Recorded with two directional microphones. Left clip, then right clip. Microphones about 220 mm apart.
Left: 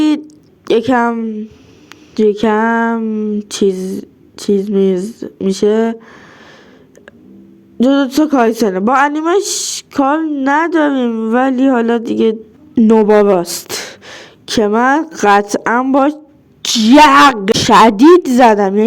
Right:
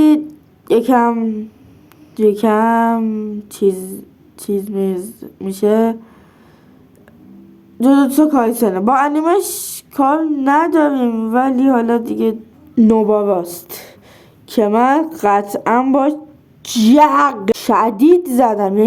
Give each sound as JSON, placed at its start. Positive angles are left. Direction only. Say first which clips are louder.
{"t": 0.0, "sound": "a woman's voice", "louder": "right 2 dB", "side_deg": 25}
{"t": 7.8, "sound": "a woman's voice", "louder": "even", "side_deg": 20}